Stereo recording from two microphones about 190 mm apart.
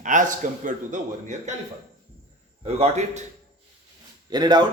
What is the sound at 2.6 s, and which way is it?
Speech, 35° right (ahead or behind).